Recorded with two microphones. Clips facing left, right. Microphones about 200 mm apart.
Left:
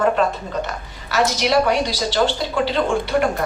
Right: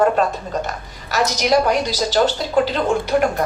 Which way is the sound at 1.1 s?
45° right (ahead or behind).